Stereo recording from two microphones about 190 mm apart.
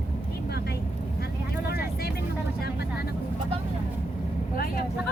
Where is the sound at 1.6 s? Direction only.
55° left (ahead or behind).